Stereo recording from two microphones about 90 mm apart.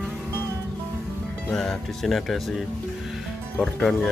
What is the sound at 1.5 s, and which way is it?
Music, 5° left (ahead or behind).